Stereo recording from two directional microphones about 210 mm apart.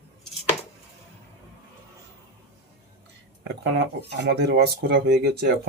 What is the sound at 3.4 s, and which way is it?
Speech, 55° right (ahead or behind).